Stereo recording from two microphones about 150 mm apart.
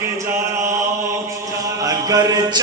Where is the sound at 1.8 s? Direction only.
25° right (ahead or behind).